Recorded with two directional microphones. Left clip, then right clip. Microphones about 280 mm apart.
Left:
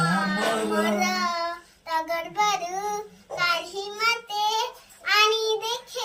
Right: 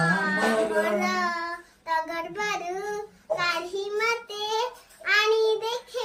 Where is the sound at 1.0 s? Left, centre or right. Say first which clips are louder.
Left 1 dB; centre.